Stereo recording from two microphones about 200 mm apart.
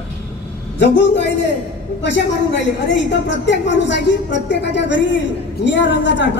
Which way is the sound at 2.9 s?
65° left (ahead or behind).